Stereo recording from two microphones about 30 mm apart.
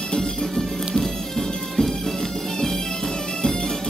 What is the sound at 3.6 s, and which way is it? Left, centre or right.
Music, centre.